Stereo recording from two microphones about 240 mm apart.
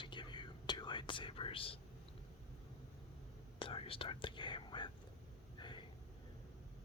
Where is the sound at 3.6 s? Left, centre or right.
Left.